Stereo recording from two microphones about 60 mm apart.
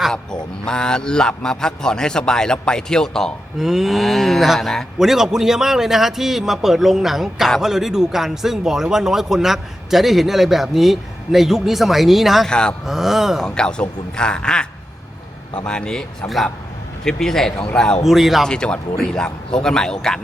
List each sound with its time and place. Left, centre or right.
0.1 s a man's voice: centre
3.6 s a man's voice: centre
12.5 s a man's voice: centre
12.8 s a man's voice: centre
13.4 s a man's voice: centre
18.0 s a man's voice: centre
18.4 s a man's voice: centre